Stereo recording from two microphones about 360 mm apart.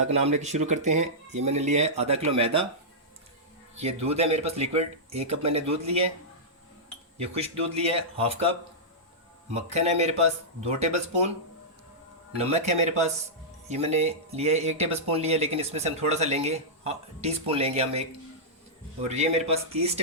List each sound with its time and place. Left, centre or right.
0.1 s speech: centre
3.8 s speech: centre
7.3 s speech: centre
12.4 s speech: centre
19.0 s speech: centre